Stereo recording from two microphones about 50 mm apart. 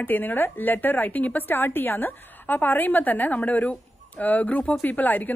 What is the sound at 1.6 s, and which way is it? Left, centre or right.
A woman's voice, left.